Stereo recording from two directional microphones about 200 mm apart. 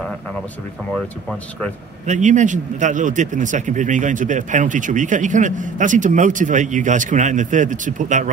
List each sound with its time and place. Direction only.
2.0 s a man's voice: 35° right (ahead or behind)